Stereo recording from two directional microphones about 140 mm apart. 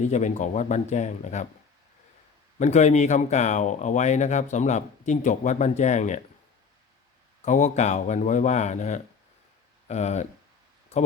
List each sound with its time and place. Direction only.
0.0 s speech: 55° left (ahead or behind)
2.6 s speech: 55° left (ahead or behind)
7.4 s speech: 60° left (ahead or behind)